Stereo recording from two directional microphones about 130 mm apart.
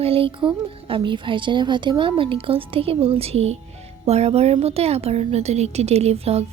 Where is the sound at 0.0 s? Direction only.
45° right (ahead or behind).